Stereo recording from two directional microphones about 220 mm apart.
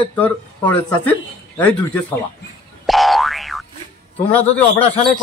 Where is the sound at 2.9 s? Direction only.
Centre (ahead or behind).